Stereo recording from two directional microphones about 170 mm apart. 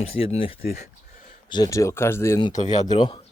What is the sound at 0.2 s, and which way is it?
Speech, 35° left (ahead or behind).